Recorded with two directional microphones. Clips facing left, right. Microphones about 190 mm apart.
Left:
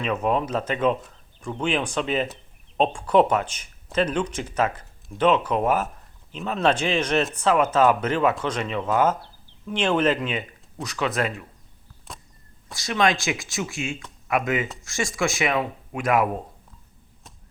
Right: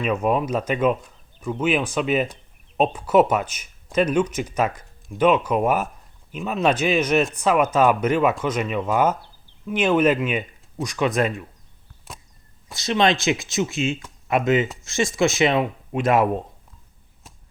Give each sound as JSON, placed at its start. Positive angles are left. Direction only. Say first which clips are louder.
{"t": 0.0, "sound": "speech", "louder": "right 2 dB", "side_deg": -10}
{"t": 12.1, "sound": "a sound", "louder": "even", "side_deg": 0}
{"t": 12.7, "sound": "speech", "louder": "right 3 dB", "side_deg": -25}